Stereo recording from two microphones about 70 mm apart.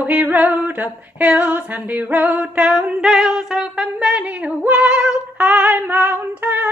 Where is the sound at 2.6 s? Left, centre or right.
Centre.